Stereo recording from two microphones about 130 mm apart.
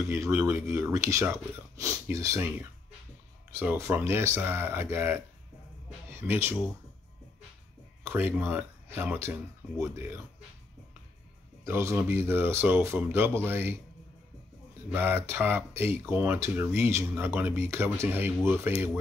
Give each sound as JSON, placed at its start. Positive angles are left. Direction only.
{"t": 0.0, "sound": "speech", "side_deg": -20}
{"t": 8.0, "sound": "speech", "side_deg": -15}
{"t": 11.6, "sound": "speech", "side_deg": -20}
{"t": 15.0, "sound": "speech", "side_deg": -15}